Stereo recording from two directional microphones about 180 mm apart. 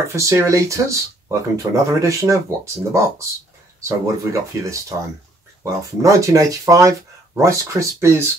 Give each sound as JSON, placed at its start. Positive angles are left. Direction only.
{"t": 0.1, "sound": "speech", "side_deg": -15}